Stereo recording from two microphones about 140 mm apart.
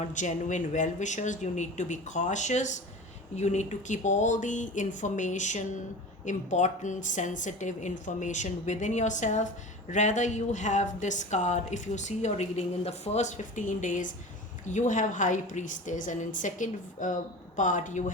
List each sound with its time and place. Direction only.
0.0 s a woman's voice: 60° left (ahead or behind)